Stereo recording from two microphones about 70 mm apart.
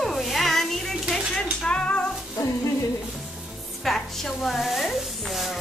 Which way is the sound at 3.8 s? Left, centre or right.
Centre.